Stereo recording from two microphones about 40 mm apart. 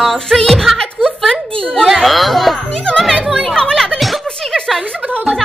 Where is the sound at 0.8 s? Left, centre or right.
Centre.